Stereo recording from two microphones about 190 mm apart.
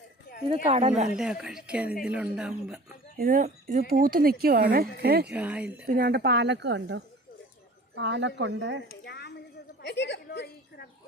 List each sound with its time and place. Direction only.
0.4 s speech: 30° right (ahead or behind)
1.1 s a woman's voice: 5° right (ahead or behind)
3.2 s speech: 50° right (ahead or behind)
5.3 s speech: 5° right (ahead or behind)
5.8 s speech: 55° right (ahead or behind)
9.0 s a sound: 60° left (ahead or behind)